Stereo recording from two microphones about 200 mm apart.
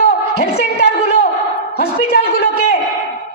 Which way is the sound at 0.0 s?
50° left (ahead or behind).